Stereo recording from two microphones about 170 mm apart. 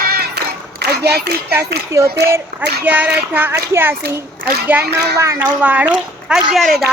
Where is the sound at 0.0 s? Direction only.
70° right (ahead or behind).